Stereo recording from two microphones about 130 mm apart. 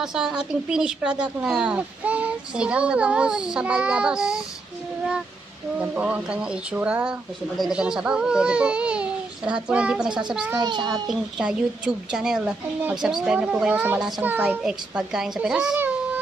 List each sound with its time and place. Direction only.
0.0 s speech: 5° right (ahead or behind)
5.8 s speech: 10° right (ahead or behind)
10.5 s a child's voice: 35° right (ahead or behind)
11.1 s a child's voice: 5° right (ahead or behind)